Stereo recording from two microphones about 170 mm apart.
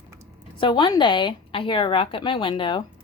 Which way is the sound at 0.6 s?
30° left (ahead or behind).